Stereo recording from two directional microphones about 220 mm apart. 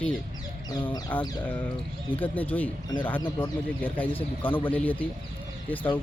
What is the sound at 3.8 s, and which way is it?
Speech, 5° left (ahead or behind).